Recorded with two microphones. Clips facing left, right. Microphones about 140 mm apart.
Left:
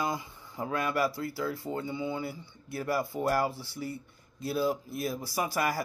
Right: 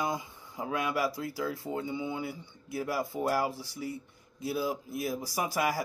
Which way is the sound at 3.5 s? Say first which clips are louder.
Right 2 dB; 90° right.